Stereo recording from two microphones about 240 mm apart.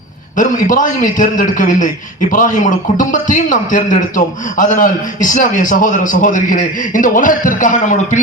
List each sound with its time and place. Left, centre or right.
0.3 s a man's voice: left